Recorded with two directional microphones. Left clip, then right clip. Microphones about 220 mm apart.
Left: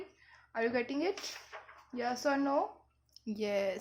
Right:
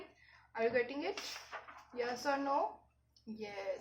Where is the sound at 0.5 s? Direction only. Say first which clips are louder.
Left 1 dB; 35° left (ahead or behind).